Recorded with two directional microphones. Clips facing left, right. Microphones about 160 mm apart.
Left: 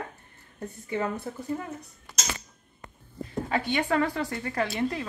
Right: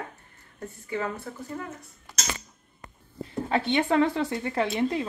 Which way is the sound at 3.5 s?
25° right (ahead or behind).